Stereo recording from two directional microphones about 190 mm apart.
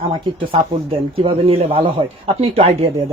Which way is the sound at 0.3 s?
30° right (ahead or behind).